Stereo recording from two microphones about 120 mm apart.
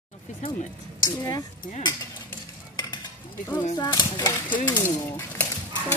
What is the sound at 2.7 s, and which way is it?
Stir, 40° left (ahead or behind).